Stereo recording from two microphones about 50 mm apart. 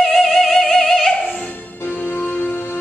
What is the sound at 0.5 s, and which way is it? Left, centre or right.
Music, centre.